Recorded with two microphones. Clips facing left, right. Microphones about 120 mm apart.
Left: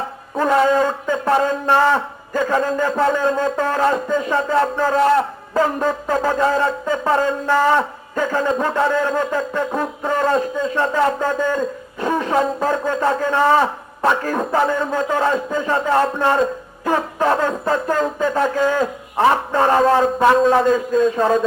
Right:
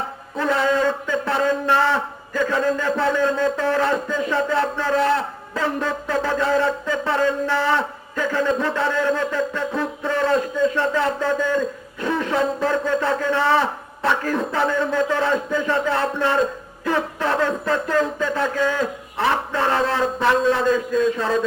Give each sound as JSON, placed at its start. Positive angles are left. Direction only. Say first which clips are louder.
{"t": 0.3, "sound": "a man's voice", "louder": "left 4 dB", "side_deg": 45}